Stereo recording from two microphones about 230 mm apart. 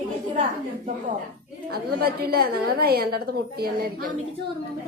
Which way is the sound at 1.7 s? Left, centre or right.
Right.